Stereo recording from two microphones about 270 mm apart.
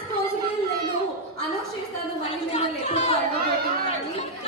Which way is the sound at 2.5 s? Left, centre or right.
Left.